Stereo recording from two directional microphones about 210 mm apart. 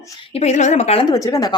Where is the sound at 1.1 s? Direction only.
15° left (ahead or behind).